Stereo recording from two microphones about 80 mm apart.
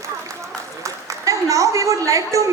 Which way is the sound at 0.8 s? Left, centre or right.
Right.